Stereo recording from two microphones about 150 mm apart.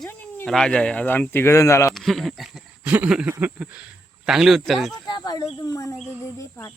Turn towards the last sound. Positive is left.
turn(degrees=20)  # may be behind; listen again after turning